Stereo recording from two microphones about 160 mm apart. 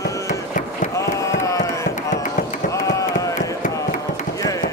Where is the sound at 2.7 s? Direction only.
20° left (ahead or behind).